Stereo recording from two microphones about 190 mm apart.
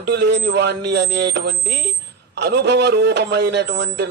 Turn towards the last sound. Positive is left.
turn(degrees=-65)  # may be behind; listen again after turning